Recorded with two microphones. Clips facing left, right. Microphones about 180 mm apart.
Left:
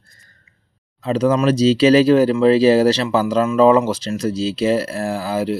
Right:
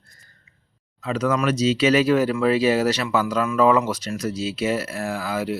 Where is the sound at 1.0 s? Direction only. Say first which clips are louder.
Left 6 dB; 30° left (ahead or behind).